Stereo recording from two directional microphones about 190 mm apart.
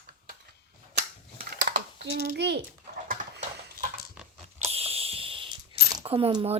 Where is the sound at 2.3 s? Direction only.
60° right (ahead or behind).